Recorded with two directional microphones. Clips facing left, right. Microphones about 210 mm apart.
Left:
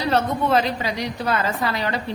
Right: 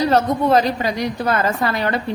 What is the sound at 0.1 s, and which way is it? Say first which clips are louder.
A woman's voice: right 4 dB; 40° right (ahead or behind).